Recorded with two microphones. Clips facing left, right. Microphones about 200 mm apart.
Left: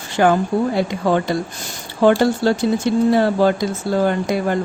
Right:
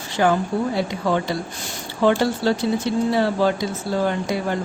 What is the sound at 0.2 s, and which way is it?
Speech, 60° left (ahead or behind).